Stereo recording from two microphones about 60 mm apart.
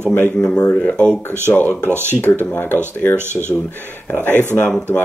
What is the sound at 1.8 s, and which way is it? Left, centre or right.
Speech, right.